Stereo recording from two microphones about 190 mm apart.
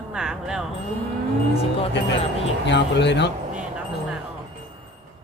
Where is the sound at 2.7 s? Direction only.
65° left (ahead or behind).